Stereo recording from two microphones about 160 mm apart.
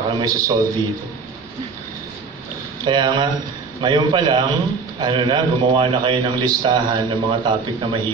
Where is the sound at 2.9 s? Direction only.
25° right (ahead or behind).